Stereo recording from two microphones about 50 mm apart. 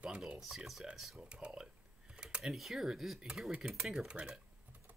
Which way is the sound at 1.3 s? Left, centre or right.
Right.